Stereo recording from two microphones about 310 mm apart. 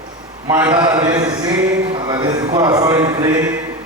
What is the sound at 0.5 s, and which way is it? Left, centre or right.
A man's voice, centre.